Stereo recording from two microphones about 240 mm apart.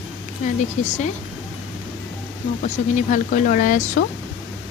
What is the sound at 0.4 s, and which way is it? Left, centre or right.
Speech, left.